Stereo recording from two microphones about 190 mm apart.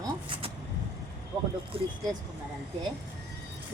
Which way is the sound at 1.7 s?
30° right (ahead or behind).